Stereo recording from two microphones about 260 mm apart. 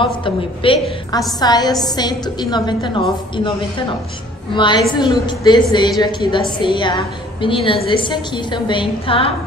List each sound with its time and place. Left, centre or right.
0.0 s a woman's voice: centre
4.6 s a woman's voice: centre